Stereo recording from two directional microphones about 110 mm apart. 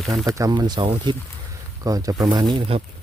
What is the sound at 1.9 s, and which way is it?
Speech, 30° right (ahead or behind).